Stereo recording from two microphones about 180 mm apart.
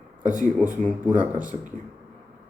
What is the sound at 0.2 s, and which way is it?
Speech, 45° right (ahead or behind).